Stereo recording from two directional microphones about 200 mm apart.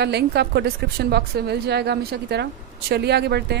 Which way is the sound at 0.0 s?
55° right (ahead or behind).